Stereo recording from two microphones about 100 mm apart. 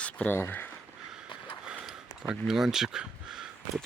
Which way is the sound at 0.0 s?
15° left (ahead or behind).